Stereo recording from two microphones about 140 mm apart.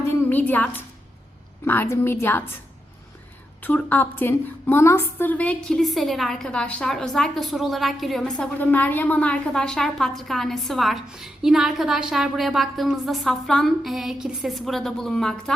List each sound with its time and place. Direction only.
0.1 s a woman's voice: 10° left (ahead or behind)
3.6 s a woman's voice: 10° left (ahead or behind)
8.5 s a woman's voice: 10° left (ahead or behind)